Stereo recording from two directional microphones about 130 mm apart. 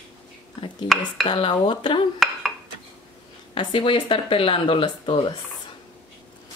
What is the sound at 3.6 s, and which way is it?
Speech, 40° left (ahead or behind).